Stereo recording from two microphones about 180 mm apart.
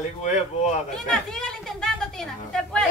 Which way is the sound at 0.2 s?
40° left (ahead or behind).